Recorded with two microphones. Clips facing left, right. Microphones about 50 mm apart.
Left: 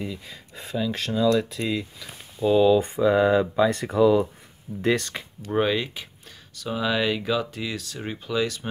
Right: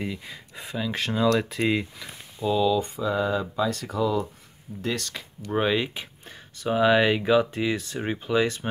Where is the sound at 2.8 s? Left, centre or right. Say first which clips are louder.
Left 6 dB; left.